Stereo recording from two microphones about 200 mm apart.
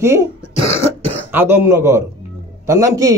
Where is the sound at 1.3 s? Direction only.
10° right (ahead or behind).